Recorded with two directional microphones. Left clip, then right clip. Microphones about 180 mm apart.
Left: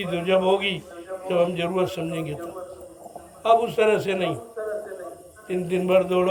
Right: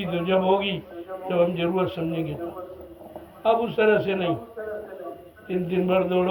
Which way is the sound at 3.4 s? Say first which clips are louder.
Left 2 dB; 20° left (ahead or behind).